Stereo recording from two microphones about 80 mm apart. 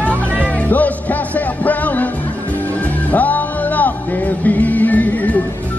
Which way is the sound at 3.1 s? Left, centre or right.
Left.